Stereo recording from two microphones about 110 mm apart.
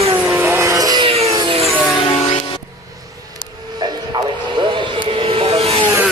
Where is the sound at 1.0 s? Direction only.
70° right (ahead or behind).